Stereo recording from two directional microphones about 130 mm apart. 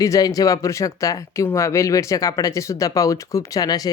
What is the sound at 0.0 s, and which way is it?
Speech, 25° left (ahead or behind).